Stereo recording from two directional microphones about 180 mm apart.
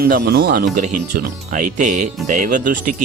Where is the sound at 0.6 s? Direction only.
45° right (ahead or behind).